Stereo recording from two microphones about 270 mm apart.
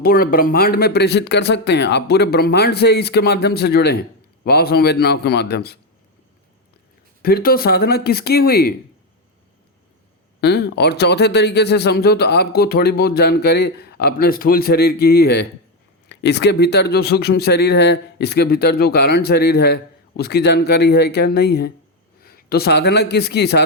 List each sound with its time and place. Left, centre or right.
0.0 s speech: left
7.2 s speech: left
10.4 s a man's voice: left